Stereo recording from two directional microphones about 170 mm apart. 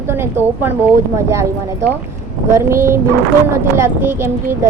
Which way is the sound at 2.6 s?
15° right (ahead or behind).